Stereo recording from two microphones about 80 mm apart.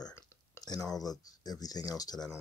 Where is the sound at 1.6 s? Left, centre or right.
Left.